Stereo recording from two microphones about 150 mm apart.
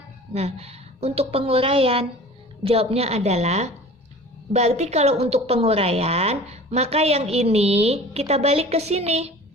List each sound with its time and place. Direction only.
0.3 s a woman's voice: 45° right (ahead or behind)